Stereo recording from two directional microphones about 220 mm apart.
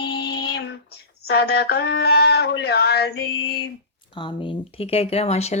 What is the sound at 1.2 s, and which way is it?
Speech, 45° left (ahead or behind).